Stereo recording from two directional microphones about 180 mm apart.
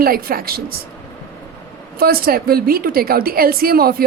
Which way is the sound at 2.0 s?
55° right (ahead or behind).